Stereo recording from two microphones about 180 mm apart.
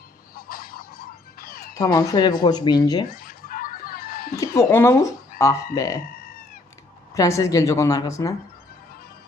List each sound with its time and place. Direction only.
0.3 s fowl: 55° left (ahead or behind)
1.8 s speech: 20° left (ahead or behind)
3.1 s a sound: 55° left (ahead or behind)
4.4 s a woman's voice: 15° left (ahead or behind)
7.1 s a woman's voice: 15° left (ahead or behind)